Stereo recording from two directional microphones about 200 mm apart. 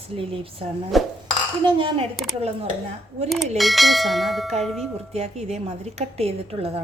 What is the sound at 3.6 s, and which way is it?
Speech, centre (ahead or behind).